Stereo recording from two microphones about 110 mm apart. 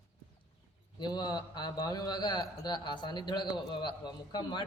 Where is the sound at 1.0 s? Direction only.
40° left (ahead or behind).